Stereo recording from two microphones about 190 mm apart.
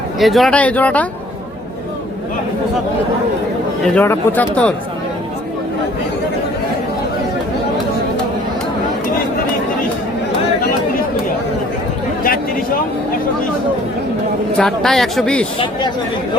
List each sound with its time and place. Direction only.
0.2 s speech: centre (ahead or behind)
3.8 s speech: 10° left (ahead or behind)
12.2 s a sound: 50° left (ahead or behind)
14.6 s speech: centre (ahead or behind)
15.5 s speech: 25° left (ahead or behind)